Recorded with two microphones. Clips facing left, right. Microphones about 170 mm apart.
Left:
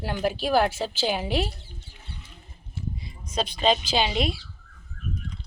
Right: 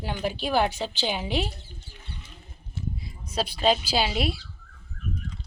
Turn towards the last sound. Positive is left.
turn(degrees=-5)  # may be behind; listen again after turning